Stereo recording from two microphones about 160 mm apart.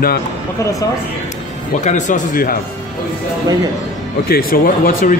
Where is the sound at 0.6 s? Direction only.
20° left (ahead or behind).